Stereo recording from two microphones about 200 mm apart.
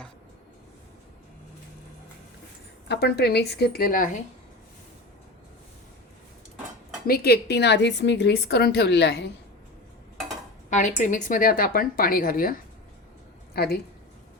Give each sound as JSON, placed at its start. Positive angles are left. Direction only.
{"t": 2.9, "sound": "a woman's voice", "side_deg": 55}
{"t": 7.1, "sound": "a woman's voice", "side_deg": 50}
{"t": 10.7, "sound": "a woman's voice", "side_deg": 40}